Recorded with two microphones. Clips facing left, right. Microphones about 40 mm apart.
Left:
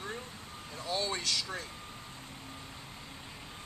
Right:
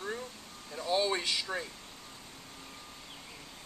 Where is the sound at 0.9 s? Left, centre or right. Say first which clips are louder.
Right 4 dB; centre.